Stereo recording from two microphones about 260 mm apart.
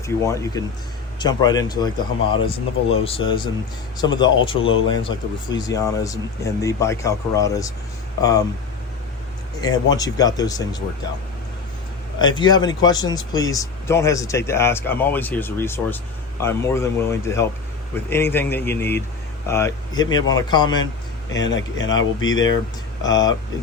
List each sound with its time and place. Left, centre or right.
0.0 s speech: centre
9.6 s speech: centre
12.2 s speech: centre
21.3 s speech: left
23.0 s speech: centre